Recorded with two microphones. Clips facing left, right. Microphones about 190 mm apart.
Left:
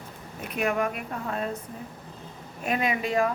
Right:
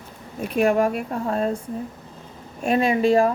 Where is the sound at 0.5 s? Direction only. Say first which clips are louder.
Right 8 dB; 30° right (ahead or behind).